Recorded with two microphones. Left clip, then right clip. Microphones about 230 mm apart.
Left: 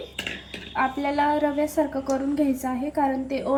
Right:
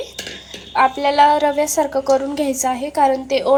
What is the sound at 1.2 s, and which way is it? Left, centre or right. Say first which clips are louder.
A woman's voice: right 9 dB; right.